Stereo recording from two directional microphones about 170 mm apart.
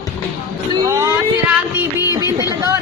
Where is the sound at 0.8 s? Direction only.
15° right (ahead or behind).